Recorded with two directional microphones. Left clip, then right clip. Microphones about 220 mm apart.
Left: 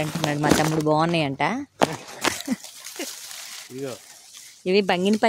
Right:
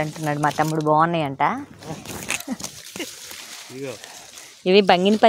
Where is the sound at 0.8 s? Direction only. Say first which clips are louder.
Right 3 dB; 25° left (ahead or behind).